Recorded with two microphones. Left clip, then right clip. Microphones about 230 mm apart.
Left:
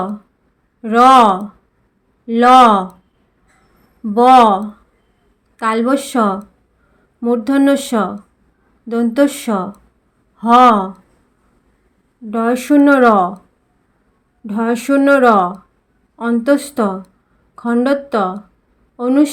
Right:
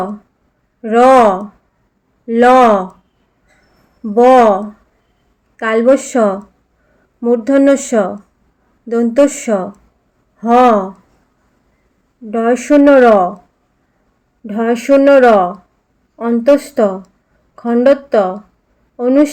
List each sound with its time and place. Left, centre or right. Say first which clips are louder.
0.8 s speech: right 1 dB; left
4.0 s a woman's voice: right 1 dB; centre
9.3 s speech: right 4 dB; centre
10.5 s speech: even; left
12.3 s speech: right 3 dB; centre
14.4 s speech: right 3 dB; left